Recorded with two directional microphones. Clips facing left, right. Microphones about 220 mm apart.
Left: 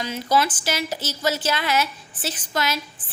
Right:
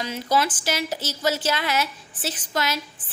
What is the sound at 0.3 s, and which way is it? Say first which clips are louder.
A woman's voice: left 1 dB; 40° right (ahead or behind).